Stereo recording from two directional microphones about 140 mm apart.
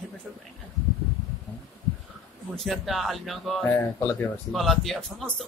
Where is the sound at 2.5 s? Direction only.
Centre (ahead or behind).